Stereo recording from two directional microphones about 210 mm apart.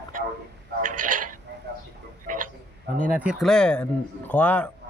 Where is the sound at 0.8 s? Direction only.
40° right (ahead or behind).